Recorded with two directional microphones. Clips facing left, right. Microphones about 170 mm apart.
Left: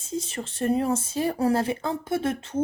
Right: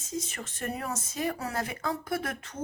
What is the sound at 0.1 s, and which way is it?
A woman's voice, 30° left (ahead or behind).